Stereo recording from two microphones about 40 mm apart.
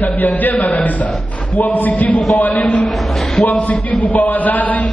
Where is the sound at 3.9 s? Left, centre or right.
Left.